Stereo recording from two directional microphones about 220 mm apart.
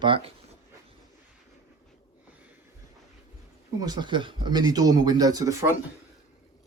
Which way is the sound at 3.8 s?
20° right (ahead or behind).